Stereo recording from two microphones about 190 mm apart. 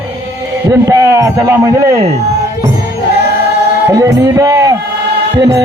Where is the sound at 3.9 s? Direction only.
15° right (ahead or behind).